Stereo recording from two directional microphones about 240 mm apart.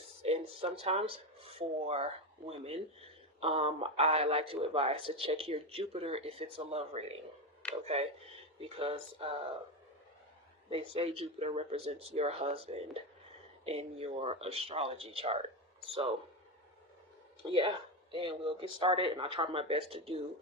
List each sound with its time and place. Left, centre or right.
0.2 s a sound: right
3.4 s a man's voice: right
10.7 s a man's voice: right
17.4 s a man's voice: right